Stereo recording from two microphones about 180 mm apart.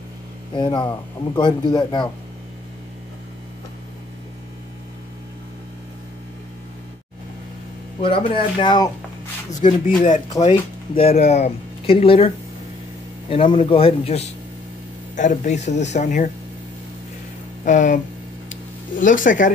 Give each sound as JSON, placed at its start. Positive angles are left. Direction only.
{"t": 0.5, "sound": "speech", "side_deg": 25}
{"t": 8.0, "sound": "speech", "side_deg": 30}
{"t": 9.6, "sound": "speech", "side_deg": 45}
{"t": 13.3, "sound": "a man's voice", "side_deg": 30}
{"t": 17.6, "sound": "speech", "side_deg": 45}
{"t": 18.5, "sound": "a sound", "side_deg": 45}